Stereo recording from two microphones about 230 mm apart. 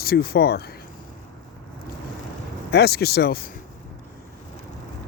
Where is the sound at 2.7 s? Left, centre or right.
Left.